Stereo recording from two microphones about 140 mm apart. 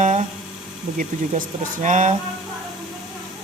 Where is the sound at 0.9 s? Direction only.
65° right (ahead or behind).